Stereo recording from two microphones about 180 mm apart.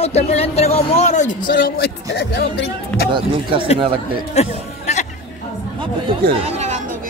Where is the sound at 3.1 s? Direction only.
30° right (ahead or behind).